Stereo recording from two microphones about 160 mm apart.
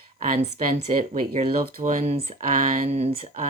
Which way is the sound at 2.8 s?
40° right (ahead or behind).